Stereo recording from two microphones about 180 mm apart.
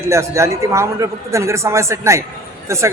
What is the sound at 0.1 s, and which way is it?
Speech, 15° right (ahead or behind).